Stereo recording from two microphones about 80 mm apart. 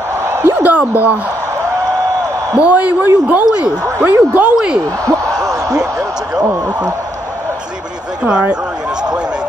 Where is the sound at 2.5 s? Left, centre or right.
Centre.